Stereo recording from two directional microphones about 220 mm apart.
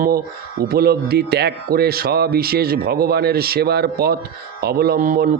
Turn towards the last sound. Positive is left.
turn(degrees=-40)  # may be behind; listen again after turning